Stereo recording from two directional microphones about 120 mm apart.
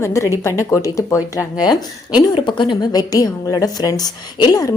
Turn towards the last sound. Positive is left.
turn(degrees=35)  # may be behind; listen again after turning